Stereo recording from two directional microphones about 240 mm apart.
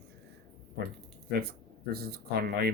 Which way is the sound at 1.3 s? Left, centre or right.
Right.